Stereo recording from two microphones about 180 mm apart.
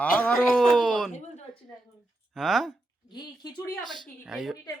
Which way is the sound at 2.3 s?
Centre (ahead or behind).